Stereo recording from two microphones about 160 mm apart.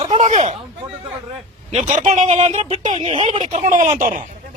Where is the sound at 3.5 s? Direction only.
50° right (ahead or behind).